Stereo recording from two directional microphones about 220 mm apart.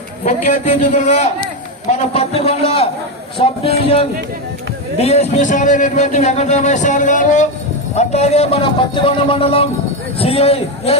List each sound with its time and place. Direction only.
0.3 s a man's voice: 35° left (ahead or behind)